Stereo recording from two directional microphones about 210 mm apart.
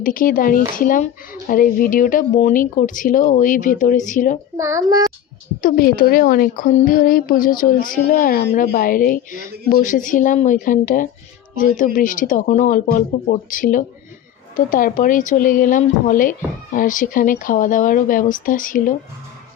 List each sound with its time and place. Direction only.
0.0 s speech: 40° left (ahead or behind)
4.5 s a child's voice: 15° right (ahead or behind)
5.6 s speech: 45° left (ahead or behind)